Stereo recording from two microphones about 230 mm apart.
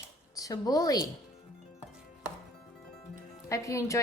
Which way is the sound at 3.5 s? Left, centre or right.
Centre.